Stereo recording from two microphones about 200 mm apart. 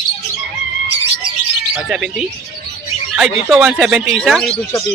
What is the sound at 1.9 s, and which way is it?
A man's voice, 5° right (ahead or behind).